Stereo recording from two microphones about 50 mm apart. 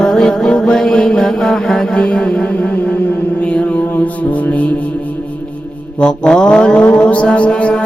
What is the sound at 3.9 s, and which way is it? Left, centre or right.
Mantra, left.